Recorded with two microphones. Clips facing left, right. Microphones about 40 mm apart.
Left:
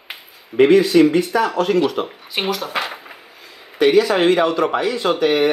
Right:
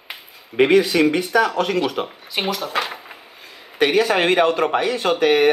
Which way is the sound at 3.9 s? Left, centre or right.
Right.